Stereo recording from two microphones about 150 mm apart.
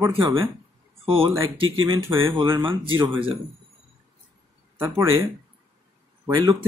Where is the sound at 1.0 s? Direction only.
40° right (ahead or behind).